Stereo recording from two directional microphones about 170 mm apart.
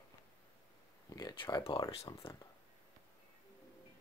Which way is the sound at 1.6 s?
30° left (ahead or behind).